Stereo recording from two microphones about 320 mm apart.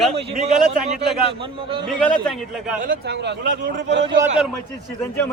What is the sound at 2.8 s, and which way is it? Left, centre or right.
A man's voice, right.